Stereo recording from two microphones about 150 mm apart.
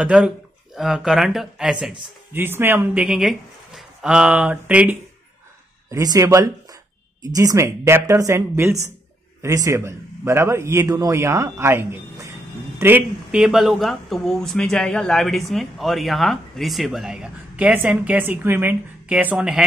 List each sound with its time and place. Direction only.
0.0 s speech: 5° right (ahead or behind)
5.9 s a man's voice: 20° right (ahead or behind)
13.4 s speech: centre (ahead or behind)